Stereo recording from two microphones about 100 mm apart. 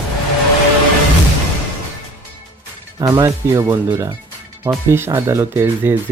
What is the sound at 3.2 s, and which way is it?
Speech, 30° right (ahead or behind).